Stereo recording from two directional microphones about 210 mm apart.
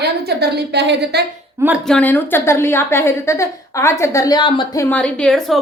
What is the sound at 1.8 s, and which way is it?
A woman's voice, 5° left (ahead or behind).